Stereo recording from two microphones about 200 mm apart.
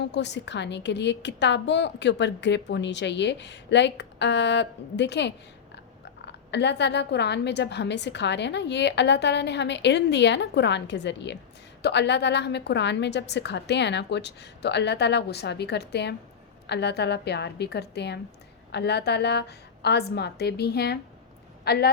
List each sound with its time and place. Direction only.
0.0 s a woman's voice: 60° left (ahead or behind)